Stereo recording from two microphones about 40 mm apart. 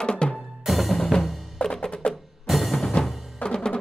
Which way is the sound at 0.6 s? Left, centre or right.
Centre.